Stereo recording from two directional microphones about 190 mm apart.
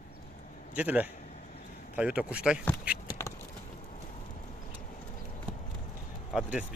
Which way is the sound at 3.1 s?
15° left (ahead or behind).